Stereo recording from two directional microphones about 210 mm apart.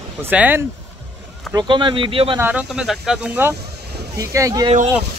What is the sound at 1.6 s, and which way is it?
Speech, 20° right (ahead or behind).